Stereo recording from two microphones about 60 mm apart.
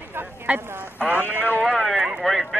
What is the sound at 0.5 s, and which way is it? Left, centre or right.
Speech, right.